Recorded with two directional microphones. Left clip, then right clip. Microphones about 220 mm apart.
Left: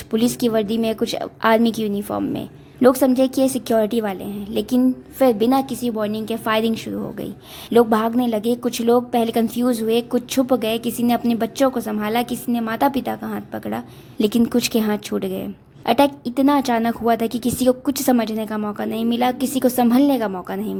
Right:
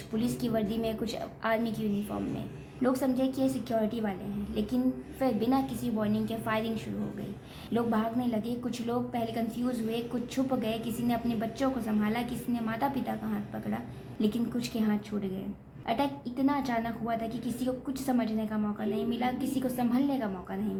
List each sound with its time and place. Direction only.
0.1 s a woman's voice: 45° left (ahead or behind)